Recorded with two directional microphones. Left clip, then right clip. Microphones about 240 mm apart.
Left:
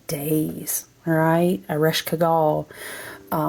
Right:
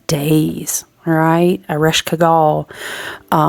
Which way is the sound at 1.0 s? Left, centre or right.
Centre.